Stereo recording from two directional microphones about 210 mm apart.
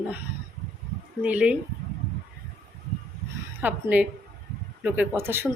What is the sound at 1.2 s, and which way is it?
Speech, 5° right (ahead or behind).